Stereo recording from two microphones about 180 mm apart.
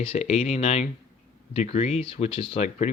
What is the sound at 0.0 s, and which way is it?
Speech, 35° left (ahead or behind).